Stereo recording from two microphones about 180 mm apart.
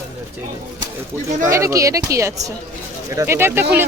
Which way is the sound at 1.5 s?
15° right (ahead or behind).